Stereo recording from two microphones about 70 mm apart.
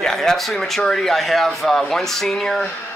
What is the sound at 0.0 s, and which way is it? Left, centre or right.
A man's voice, centre.